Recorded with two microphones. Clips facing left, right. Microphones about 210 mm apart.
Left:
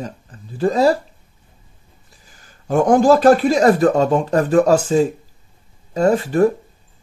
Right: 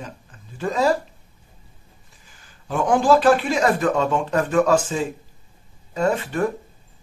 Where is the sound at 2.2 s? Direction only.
40° left (ahead or behind).